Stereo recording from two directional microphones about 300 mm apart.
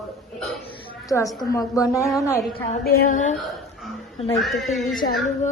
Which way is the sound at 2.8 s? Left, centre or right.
Left.